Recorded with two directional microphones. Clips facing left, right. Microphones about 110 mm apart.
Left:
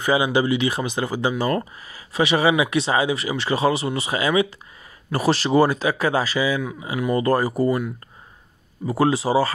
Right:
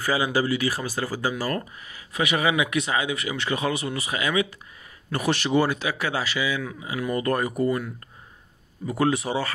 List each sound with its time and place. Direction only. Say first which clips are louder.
0.0 s speech: left 4 dB; 20° left (ahead or behind); by 6.6 s 40° left (ahead or behind)
7.0 s speech: left 5 dB; 25° left (ahead or behind)
8.8 s speech: left 4 dB; 30° left (ahead or behind)